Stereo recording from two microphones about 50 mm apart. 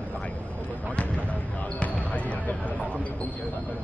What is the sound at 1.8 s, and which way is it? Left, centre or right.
Basketball bounce, left.